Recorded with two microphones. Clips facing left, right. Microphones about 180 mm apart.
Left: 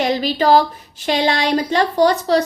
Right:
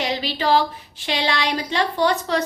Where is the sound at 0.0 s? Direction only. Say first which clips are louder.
Left 6 dB; 45° left (ahead or behind).